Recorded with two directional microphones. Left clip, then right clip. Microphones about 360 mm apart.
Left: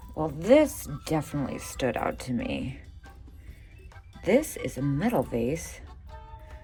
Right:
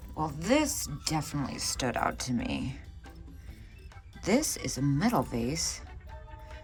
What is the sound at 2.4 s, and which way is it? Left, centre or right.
Speech, right.